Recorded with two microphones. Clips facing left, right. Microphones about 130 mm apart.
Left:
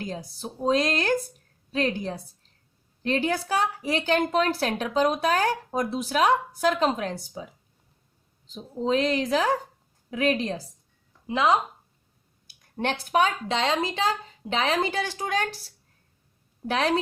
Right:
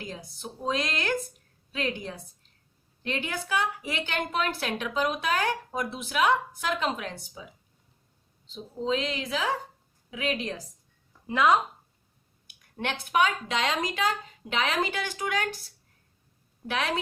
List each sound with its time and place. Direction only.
0.0 s a woman's voice: 35° left (ahead or behind)
8.4 s a woman's voice: 45° left (ahead or behind)
11.3 s speech: 20° left (ahead or behind)
12.5 s a woman's voice: 35° left (ahead or behind)
16.6 s a woman's voice: 35° left (ahead or behind)